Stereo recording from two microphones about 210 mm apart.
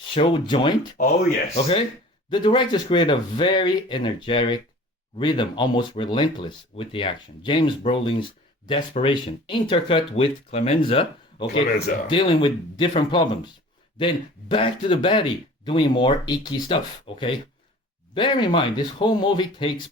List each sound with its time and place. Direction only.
0.1 s speech: 25° left (ahead or behind)